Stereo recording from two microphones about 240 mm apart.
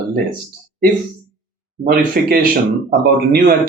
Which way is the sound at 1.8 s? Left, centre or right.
Right.